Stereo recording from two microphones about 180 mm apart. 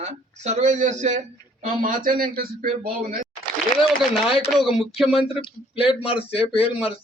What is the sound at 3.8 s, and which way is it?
A man's voice, centre (ahead or behind).